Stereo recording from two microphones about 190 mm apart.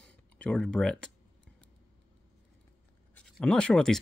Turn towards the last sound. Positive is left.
turn(degrees=5)  # may be behind; listen again after turning